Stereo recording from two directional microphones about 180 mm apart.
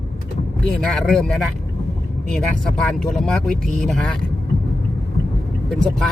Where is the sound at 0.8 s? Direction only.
5° left (ahead or behind).